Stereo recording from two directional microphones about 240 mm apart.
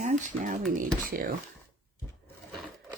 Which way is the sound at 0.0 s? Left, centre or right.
Right.